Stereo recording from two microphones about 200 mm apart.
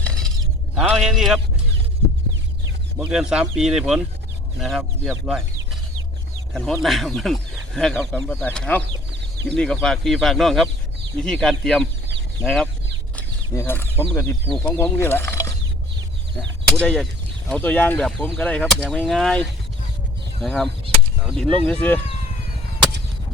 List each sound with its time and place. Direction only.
0.0 s a sound: centre (ahead or behind)
0.8 s speech: 5° right (ahead or behind)
3.0 s speech: 5° right (ahead or behind)
6.5 s speech: centre (ahead or behind)
8.8 s a sound: 60° right (ahead or behind)
9.5 s speech: 5° left (ahead or behind)
13.1 s speech: 10° left (ahead or behind)
16.8 s speech: 5° left (ahead or behind)